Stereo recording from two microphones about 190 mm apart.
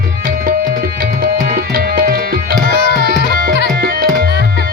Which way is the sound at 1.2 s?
50° right (ahead or behind).